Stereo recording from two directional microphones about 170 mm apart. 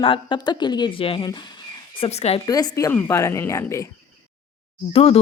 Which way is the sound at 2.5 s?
20° left (ahead or behind).